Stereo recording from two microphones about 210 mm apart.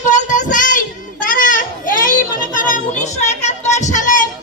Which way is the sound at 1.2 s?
40° left (ahead or behind).